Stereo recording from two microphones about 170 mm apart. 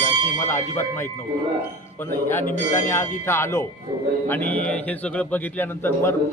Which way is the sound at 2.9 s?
15° left (ahead or behind).